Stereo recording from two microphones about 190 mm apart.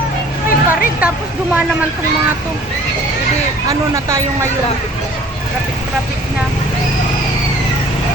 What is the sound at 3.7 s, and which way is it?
Speech, 15° right (ahead or behind).